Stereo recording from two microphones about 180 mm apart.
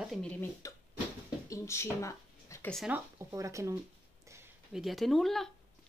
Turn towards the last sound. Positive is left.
turn(degrees=0)  # may be behind; listen again after turning